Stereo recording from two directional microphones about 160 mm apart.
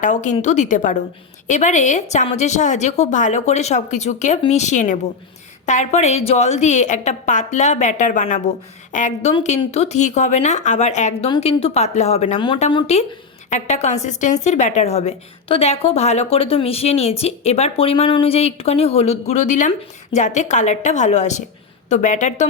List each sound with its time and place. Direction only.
0.0 s a woman's voice: 50° left (ahead or behind)
13.5 s a woman's voice: 45° left (ahead or behind)